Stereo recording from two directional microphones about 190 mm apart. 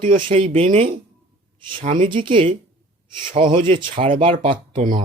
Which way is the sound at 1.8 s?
40° right (ahead or behind).